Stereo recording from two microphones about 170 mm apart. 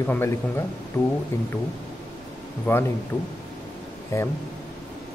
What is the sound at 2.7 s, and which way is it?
Speech, 10° left (ahead or behind).